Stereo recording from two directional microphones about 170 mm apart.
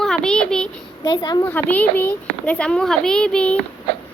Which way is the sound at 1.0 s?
25° left (ahead or behind).